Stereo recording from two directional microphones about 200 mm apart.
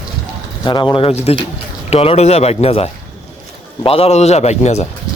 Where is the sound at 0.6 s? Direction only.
25° left (ahead or behind).